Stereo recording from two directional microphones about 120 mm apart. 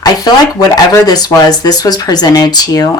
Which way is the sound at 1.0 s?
30° left (ahead or behind).